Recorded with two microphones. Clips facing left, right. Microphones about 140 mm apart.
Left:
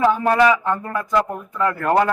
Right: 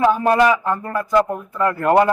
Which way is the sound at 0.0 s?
10° right (ahead or behind).